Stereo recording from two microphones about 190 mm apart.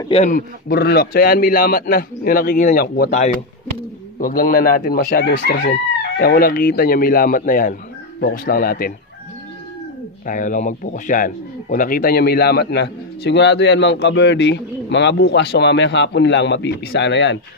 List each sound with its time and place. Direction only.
0.1 s a man's voice: 40° left (ahead or behind)
0.7 s a man's voice: 55° left (ahead or behind)
4.2 s a man's voice: 50° left (ahead or behind)
5.3 s speech: 75° left (ahead or behind)
5.6 s a man's voice: 50° left (ahead or behind)
10.2 s speech: 45° left (ahead or behind); by 17.4 s 70° left (ahead or behind)